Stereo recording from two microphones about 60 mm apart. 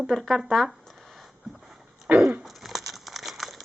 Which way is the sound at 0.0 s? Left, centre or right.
Centre.